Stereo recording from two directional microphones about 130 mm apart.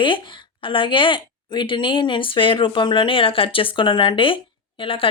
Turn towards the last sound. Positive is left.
turn(degrees=45)  # may be behind; listen again after turning